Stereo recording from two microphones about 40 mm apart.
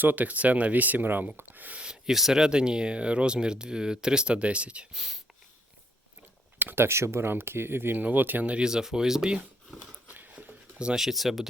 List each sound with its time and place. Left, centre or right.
0.0 s speech: right
0.3 s speech: right
1.7 s speech: right
2.0 s speech: centre; by 4.9 s right
4.9 s speech: centre
6.7 s speech: right
7.9 s speech: right
8.6 s speech: centre
10.1 s a sound: right
10.9 s speech: centre